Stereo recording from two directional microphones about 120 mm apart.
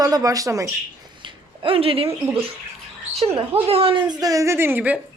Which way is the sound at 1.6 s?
50° right (ahead or behind).